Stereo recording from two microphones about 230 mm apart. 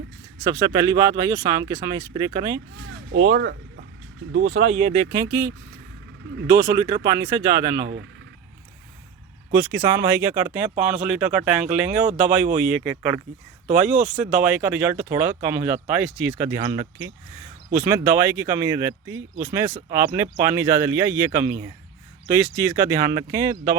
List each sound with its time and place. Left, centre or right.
0.4 s speech: centre
4.3 s speech: right
4.6 s speech: right
5.1 s speech: centre
7.8 s speech: right
9.6 s speech: centre